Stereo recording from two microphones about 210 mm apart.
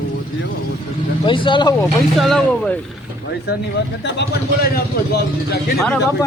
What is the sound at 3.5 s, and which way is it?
A man's voice, 50° left (ahead or behind).